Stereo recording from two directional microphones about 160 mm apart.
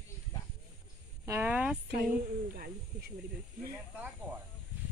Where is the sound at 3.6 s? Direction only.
15° right (ahead or behind).